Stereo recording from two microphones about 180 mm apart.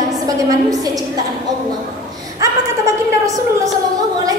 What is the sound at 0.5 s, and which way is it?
Speech, 20° right (ahead or behind).